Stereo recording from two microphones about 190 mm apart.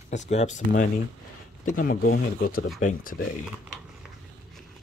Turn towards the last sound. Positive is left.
turn(degrees=45)  # may be behind; listen again after turning